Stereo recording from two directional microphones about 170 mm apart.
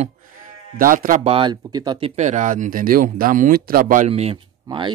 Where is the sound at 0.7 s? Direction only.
55° right (ahead or behind).